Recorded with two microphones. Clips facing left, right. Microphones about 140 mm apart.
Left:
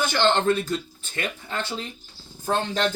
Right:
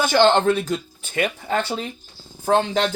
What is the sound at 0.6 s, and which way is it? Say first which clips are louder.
Speech: right 3 dB; 70° right (ahead or behind).